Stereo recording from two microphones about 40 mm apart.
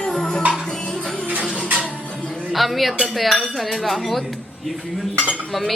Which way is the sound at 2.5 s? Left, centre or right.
Centre.